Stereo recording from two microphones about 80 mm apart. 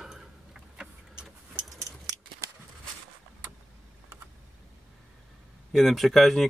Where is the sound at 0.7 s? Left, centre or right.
Centre.